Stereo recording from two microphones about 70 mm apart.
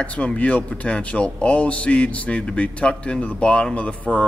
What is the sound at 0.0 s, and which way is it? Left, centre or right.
Speech, centre.